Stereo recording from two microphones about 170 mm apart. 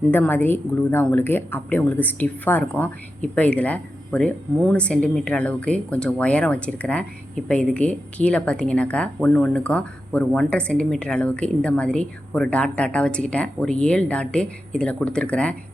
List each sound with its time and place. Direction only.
0.1 s a woman's voice: 10° left (ahead or behind)